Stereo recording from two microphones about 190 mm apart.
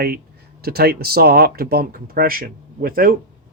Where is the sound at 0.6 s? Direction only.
55° right (ahead or behind).